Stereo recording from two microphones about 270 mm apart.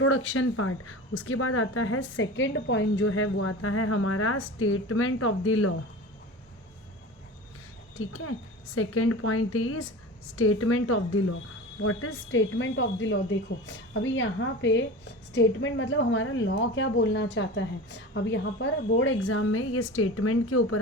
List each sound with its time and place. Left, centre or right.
0.0 s speech: left
7.9 s speech: left